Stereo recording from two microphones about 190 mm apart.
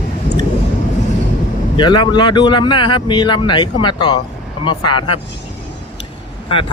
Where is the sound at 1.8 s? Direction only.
25° left (ahead or behind).